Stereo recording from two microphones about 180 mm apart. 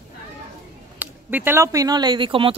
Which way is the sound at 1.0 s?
10° right (ahead or behind).